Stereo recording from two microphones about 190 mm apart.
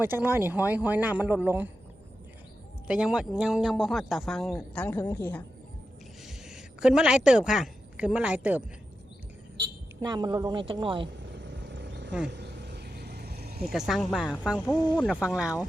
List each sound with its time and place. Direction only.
0.0 s a man's voice: 10° right (ahead or behind)
2.8 s speech: 5° right (ahead or behind)
6.2 s speech: 5° right (ahead or behind)
9.6 s a sound: 70° right (ahead or behind)
10.0 s speech: 20° right (ahead or behind)
11.2 s vehicle: 70° right (ahead or behind)
12.3 s a sound: 60° right (ahead or behind)
13.7 s speech: centre (ahead or behind)